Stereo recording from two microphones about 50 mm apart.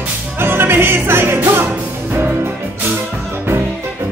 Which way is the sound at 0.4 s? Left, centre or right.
Right.